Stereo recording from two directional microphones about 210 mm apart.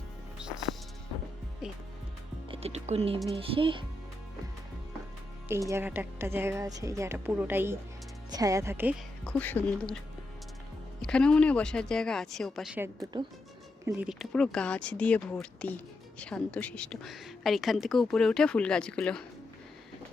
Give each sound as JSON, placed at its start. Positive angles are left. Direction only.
{"t": 0.3, "sound": "music", "side_deg": -5}
{"t": 2.5, "sound": "music", "side_deg": -30}
{"t": 3.3, "sound": "speech", "side_deg": -25}
{"t": 5.5, "sound": "a woman's voice", "side_deg": -15}
{"t": 9.2, "sound": "speech", "side_deg": 10}
{"t": 11.0, "sound": "speech", "side_deg": 5}